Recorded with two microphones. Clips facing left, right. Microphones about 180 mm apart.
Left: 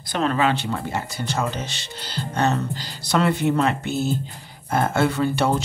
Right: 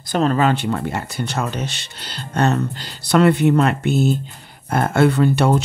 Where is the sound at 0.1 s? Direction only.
40° right (ahead or behind).